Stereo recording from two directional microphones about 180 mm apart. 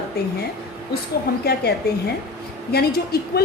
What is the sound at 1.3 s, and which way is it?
Speech, 60° left (ahead or behind).